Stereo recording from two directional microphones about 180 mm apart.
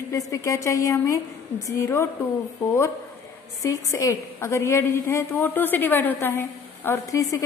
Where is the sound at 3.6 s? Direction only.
15° left (ahead or behind).